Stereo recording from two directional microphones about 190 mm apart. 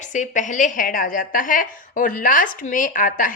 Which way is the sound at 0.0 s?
40° left (ahead or behind).